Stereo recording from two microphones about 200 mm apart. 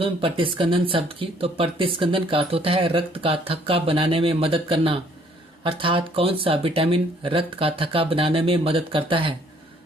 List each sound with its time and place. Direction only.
0.0 s speech: 25° right (ahead or behind)